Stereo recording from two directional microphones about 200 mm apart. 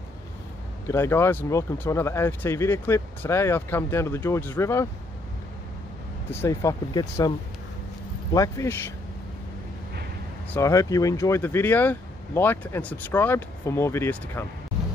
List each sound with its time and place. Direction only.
0.8 s speech: 15° left (ahead or behind)
6.3 s speech: 15° left (ahead or behind)
10.5 s speech: 15° left (ahead or behind)